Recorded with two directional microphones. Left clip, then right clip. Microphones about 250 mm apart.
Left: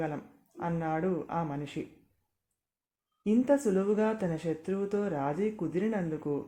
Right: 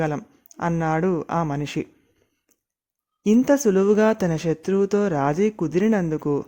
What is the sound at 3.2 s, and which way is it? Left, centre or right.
Speech, right.